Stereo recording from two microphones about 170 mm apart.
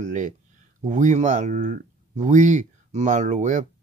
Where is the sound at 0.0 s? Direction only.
45° right (ahead or behind).